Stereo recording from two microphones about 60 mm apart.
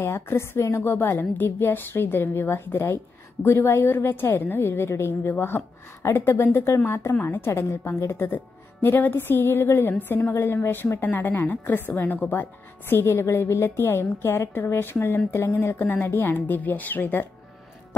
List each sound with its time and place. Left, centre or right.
0.0 s a woman's voice: left
15.8 s a woman's voice: left